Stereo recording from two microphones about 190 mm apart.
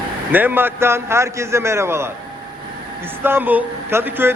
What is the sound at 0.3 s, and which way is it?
A man's voice, 10° right (ahead or behind).